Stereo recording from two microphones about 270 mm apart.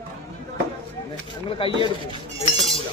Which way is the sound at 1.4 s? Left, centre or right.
Centre.